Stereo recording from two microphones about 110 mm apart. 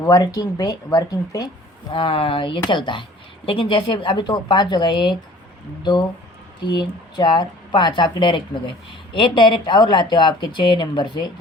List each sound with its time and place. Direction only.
0.0 s speech: 35° left (ahead or behind)
1.9 s speech: 50° left (ahead or behind)
6.7 s speech: 45° left (ahead or behind)